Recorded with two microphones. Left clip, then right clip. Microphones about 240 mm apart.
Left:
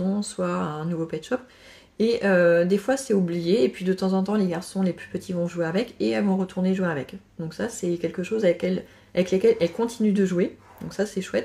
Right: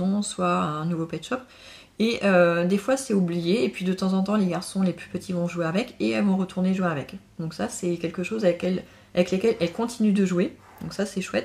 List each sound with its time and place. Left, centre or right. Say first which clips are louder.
0.4 s speech: right 4 dB; centre